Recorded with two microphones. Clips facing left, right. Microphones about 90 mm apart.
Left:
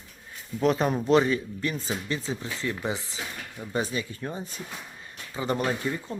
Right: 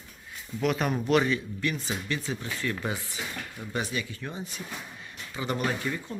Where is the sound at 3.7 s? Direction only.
35° left (ahead or behind).